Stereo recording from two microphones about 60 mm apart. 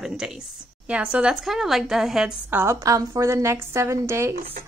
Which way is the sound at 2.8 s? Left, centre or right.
Right.